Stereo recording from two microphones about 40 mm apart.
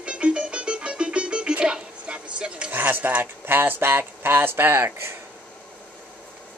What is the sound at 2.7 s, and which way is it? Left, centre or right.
Speech, right.